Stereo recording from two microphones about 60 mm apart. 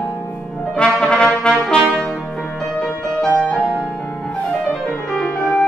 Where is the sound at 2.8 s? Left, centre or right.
Centre.